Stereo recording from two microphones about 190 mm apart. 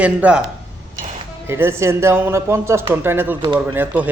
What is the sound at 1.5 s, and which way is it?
A man's voice, 15° right (ahead or behind).